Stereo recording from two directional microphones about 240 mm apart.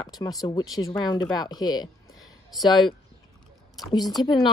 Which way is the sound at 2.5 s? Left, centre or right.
Centre.